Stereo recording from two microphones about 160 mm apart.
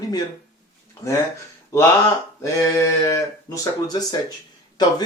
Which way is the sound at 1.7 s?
20° left (ahead or behind).